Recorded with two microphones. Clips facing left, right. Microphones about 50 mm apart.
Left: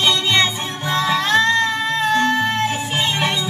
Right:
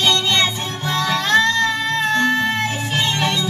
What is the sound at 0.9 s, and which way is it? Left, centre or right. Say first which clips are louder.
Music: even; centre.